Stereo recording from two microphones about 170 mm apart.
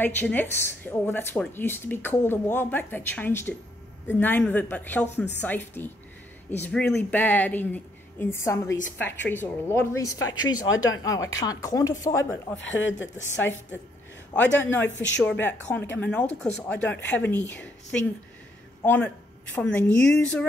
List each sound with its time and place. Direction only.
0.0 s speech: 10° left (ahead or behind)
12.5 s speech: 90° left
14.3 s speech: 10° left (ahead or behind)
18.8 s speech: 10° left (ahead or behind)